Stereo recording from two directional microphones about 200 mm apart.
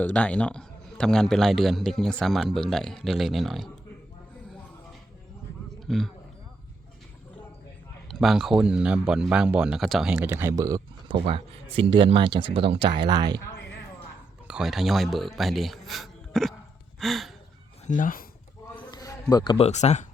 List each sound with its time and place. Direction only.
0.0 s a man's voice: 5° left (ahead or behind)
5.8 s speech: centre (ahead or behind)
8.0 s a man's voice: centre (ahead or behind); by 13.4 s 20° right (ahead or behind)
14.4 s a man's voice: 5° right (ahead or behind)
17.8 s speech: 40° left (ahead or behind)
18.8 s a sound: 20° left (ahead or behind)
19.3 s speech: 20° left (ahead or behind)
19.5 s speech: 35° left (ahead or behind)